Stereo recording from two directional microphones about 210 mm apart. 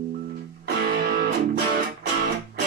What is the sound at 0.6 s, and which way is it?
Music, 45° right (ahead or behind).